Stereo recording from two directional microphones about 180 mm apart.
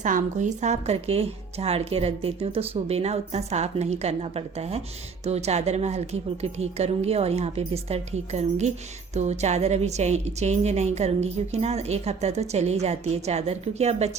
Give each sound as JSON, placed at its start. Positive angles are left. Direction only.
{"t": 0.0, "sound": "a woman's voice", "side_deg": -45}